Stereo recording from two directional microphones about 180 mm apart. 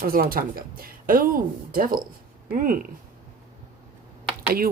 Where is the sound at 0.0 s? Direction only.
55° right (ahead or behind).